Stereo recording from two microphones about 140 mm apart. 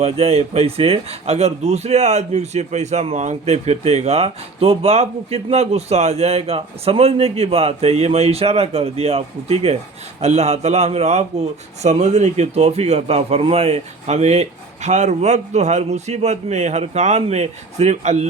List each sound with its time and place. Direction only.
0.0 s speech: 45° right (ahead or behind)